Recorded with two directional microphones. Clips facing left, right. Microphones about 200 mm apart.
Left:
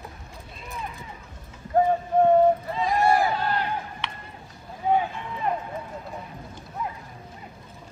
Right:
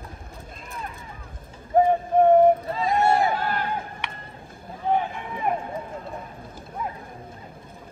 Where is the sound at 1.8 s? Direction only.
15° right (ahead or behind).